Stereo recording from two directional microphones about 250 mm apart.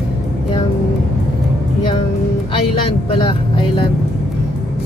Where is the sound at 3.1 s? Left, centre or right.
Centre.